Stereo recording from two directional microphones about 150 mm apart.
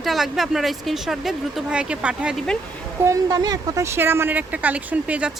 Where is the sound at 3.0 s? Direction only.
25° right (ahead or behind).